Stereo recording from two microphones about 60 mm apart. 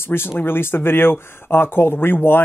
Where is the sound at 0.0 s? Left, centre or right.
Left.